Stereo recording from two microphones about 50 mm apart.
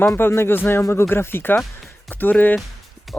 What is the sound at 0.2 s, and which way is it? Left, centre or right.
Speech, left.